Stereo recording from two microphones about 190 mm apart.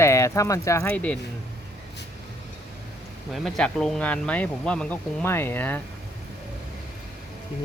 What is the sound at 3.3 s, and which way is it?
Speech, centre (ahead or behind).